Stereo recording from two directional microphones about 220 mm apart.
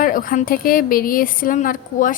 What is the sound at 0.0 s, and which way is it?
A woman's voice, 40° left (ahead or behind).